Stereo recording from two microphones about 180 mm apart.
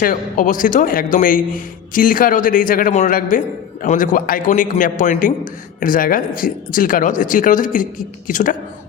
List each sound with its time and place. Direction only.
0.0 s speech: 50° left (ahead or behind)